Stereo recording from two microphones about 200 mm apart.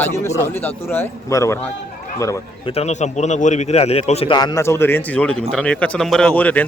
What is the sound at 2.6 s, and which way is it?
A man's voice, 30° left (ahead or behind).